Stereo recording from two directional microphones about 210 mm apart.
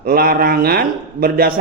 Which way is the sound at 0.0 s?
45° right (ahead or behind).